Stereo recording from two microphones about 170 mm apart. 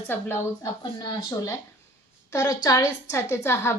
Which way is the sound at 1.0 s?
25° left (ahead or behind).